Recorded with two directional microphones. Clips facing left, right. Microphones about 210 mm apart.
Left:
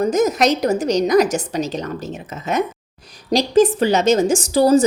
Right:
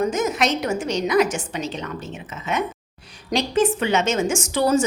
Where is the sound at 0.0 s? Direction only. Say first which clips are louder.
Left 5 dB; 40° left (ahead or behind).